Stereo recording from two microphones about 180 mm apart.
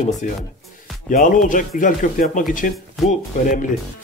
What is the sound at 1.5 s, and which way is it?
Speech, 50° left (ahead or behind).